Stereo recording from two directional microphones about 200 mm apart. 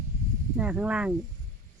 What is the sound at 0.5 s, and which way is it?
Speech, 5° right (ahead or behind).